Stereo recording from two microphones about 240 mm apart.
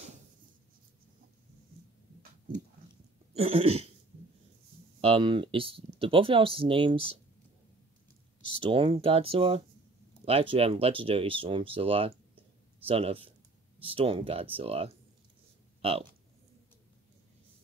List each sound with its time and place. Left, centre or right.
3.3 s speech: right
5.0 s speech: right
8.5 s speech: right